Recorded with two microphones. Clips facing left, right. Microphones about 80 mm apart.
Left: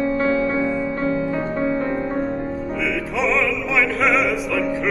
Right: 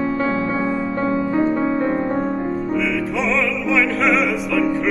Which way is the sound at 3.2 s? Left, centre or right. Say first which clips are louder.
Left 3 dB; centre.